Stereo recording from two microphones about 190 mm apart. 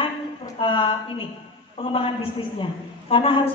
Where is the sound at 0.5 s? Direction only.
25° left (ahead or behind).